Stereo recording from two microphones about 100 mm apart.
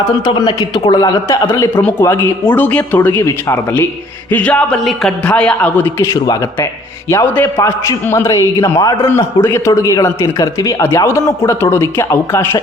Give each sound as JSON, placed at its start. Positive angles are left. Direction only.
{"t": 0.3, "sound": "a man's voice", "side_deg": 50}
{"t": 2.0, "sound": "a man's voice", "side_deg": 25}
{"t": 4.3, "sound": "a man's voice", "side_deg": 15}
{"t": 4.8, "sound": "speech", "side_deg": 0}
{"t": 5.2, "sound": "a man's voice", "side_deg": 10}
{"t": 6.1, "sound": "a man's voice", "side_deg": 35}
{"t": 7.3, "sound": "a man's voice", "side_deg": 20}
{"t": 9.0, "sound": "a man's voice", "side_deg": 25}